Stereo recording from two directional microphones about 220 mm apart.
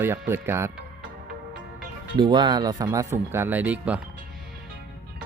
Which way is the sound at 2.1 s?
20° right (ahead or behind).